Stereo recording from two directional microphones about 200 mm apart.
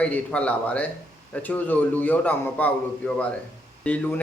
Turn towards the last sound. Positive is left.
turn(degrees=10)  # may be behind; listen again after turning